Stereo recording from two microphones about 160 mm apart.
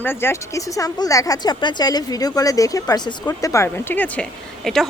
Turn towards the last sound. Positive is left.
turn(degrees=5)  # may be behind; listen again after turning